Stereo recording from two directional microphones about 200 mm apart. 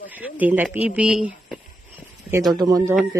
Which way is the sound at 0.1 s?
5° right (ahead or behind).